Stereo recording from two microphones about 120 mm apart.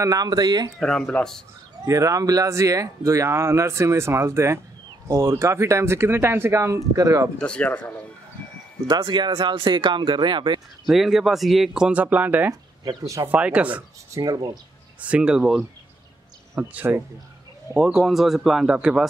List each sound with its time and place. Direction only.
0.0 s speech: 30° right (ahead or behind)
0.7 s speech: centre (ahead or behind)
1.9 s speech: 25° right (ahead or behind)
7.3 s speech: 10° left (ahead or behind)
8.8 s speech: 40° right (ahead or behind)
10.9 s speech: centre (ahead or behind)
12.8 s speech: 25° right (ahead or behind)
13.3 s speech: 10° right (ahead or behind)
14.1 s speech: 30° right (ahead or behind)
15.0 s speech: 10° right (ahead or behind)
16.5 s speech: 20° right (ahead or behind)
17.7 s speech: centre (ahead or behind)